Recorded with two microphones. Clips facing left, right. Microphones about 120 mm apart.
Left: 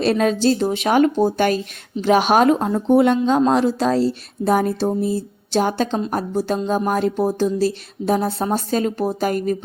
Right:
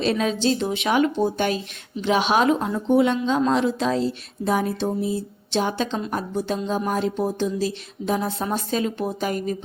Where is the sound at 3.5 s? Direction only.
40° left (ahead or behind).